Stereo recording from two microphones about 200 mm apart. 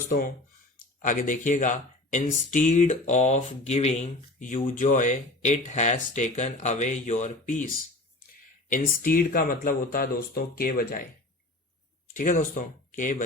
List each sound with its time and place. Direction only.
1.0 s speech: 40° left (ahead or behind)
8.7 s speech: 45° left (ahead or behind)
12.1 s speech: 40° left (ahead or behind)